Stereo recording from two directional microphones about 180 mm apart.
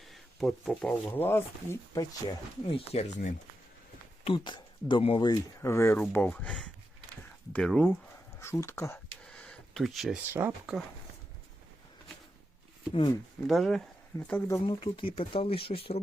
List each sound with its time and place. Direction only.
0.1 s speech: centre (ahead or behind)
9.2 s a sound: 5° left (ahead or behind)
10.3 s speech: 10° right (ahead or behind)
12.9 s speech: 25° left (ahead or behind)
13.5 s speech: centre (ahead or behind)
14.6 s speech: 30° left (ahead or behind)